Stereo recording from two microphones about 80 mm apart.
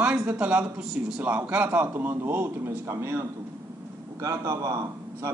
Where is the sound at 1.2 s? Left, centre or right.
Right.